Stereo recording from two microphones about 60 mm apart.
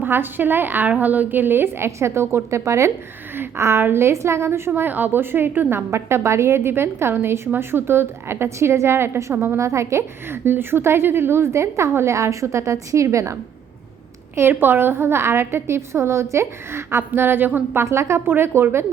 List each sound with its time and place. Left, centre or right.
0.0 s a woman's voice: right
9.3 s a woman's voice: right
9.6 s a woman's voice: right
10.2 s a woman's voice: right
14.3 s a woman's voice: right
17.2 s a woman's voice: right
17.8 s a woman's voice: right
18.3 s a woman's voice: right